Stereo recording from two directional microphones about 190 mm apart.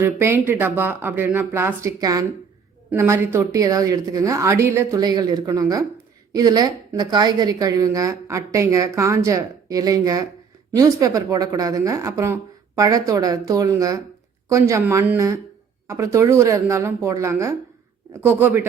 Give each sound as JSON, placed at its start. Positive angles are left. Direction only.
{"t": 0.0, "sound": "a woman's voice", "side_deg": -15}